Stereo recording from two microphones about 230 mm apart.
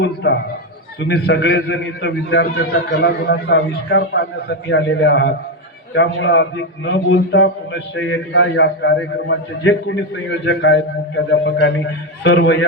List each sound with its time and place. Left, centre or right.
0.0 s a man's voice: left